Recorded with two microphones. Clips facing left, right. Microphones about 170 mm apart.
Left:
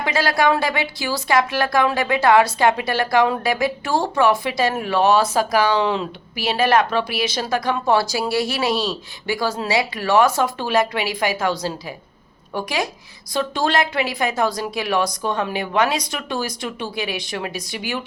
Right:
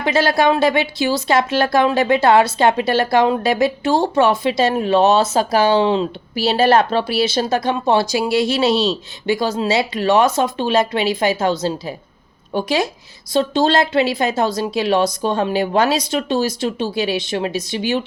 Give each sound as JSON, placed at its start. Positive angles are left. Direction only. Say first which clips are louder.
{"t": 0.0, "sound": "speech", "louder": "right 3 dB", "side_deg": -25}